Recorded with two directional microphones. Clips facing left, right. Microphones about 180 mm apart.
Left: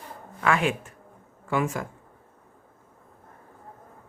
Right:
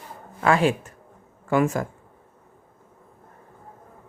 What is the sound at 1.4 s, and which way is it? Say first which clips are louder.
Speech: right 5 dB; 45° right (ahead or behind).